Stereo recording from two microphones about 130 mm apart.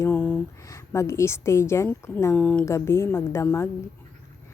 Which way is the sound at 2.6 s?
20° left (ahead or behind).